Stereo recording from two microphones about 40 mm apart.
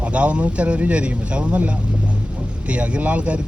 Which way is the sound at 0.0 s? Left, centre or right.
Right.